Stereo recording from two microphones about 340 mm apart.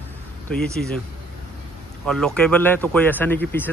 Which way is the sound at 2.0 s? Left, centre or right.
Centre.